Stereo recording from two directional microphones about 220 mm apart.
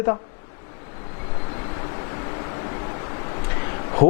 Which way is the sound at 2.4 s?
20° left (ahead or behind).